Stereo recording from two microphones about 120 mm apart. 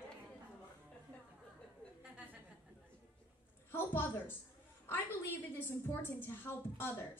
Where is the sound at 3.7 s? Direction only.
20° left (ahead or behind).